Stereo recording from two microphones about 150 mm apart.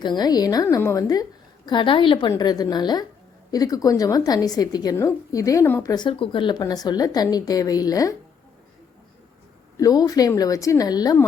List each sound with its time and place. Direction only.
0.0 s a woman's voice: 30° left (ahead or behind)
9.7 s a woman's voice: 25° left (ahead or behind)